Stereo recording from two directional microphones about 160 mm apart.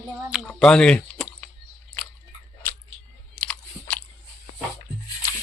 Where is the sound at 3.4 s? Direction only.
10° left (ahead or behind).